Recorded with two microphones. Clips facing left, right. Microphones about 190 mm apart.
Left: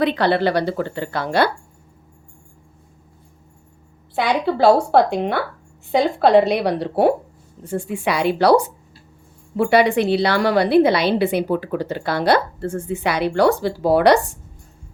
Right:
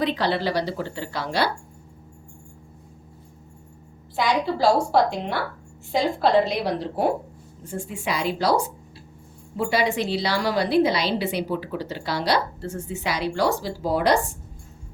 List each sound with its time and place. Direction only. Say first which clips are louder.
0.0 s a woman's voice: left 6 dB; 60° left (ahead or behind)
4.1 s a woman's voice: left 3 dB; 60° left (ahead or behind)